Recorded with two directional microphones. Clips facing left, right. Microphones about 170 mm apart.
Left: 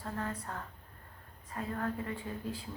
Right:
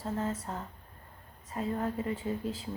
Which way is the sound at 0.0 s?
25° right (ahead or behind).